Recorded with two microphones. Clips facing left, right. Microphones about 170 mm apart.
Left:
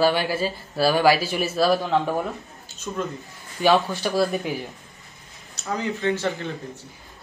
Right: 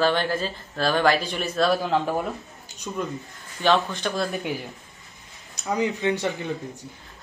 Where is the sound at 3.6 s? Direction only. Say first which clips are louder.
Left 2 dB; 10° left (ahead or behind).